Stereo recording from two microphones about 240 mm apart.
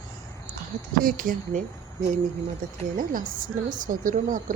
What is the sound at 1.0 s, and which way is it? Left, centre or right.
Speech, right.